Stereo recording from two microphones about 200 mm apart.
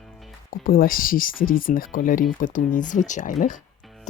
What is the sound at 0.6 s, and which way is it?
Speech, 45° left (ahead or behind).